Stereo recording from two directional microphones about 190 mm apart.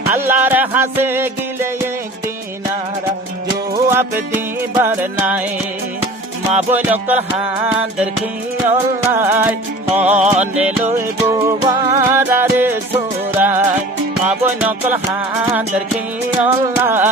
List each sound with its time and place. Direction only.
0.1 s music: 10° right (ahead or behind)
3.7 s music: 15° right (ahead or behind)
6.7 s music: 10° right (ahead or behind)
9.9 s music: 35° right (ahead or behind)
10.5 s music: 5° right (ahead or behind)
16.4 s music: 10° right (ahead or behind)